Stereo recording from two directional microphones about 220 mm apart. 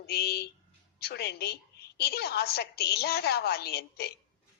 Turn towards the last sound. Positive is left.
turn(degrees=45)  # may be behind; listen again after turning